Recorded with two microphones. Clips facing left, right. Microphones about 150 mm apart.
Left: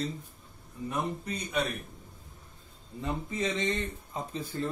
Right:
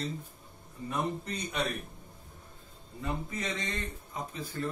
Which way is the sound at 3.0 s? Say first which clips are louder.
Left 3 dB; 25° left (ahead or behind).